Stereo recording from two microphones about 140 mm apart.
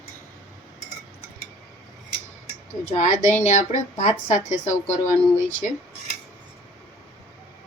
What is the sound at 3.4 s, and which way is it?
A woman's voice, 55° left (ahead or behind).